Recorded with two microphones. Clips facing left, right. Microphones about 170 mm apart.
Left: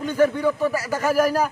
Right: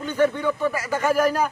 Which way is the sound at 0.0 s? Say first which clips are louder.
Left 2 dB; 40° left (ahead or behind).